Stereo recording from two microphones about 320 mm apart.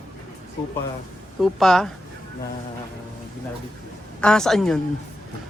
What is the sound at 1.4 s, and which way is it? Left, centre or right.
Speech, centre.